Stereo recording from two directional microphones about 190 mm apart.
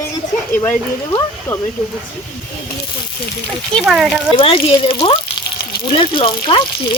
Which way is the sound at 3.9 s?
Centre (ahead or behind).